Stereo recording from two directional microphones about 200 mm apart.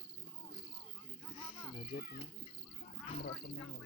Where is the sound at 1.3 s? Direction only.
25° left (ahead or behind).